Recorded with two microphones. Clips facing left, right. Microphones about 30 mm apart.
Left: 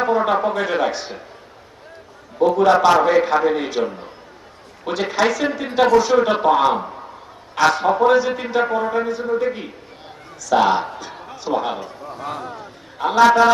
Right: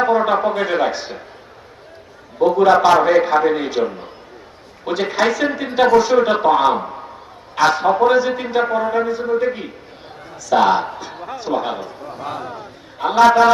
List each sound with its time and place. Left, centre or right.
0.0 s a sound: centre
0.6 s a man's voice: centre
2.4 s a man's voice: centre
4.9 s a man's voice: centre